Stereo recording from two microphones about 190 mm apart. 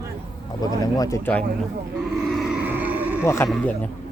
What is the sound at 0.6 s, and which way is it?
Speech, 20° left (ahead or behind).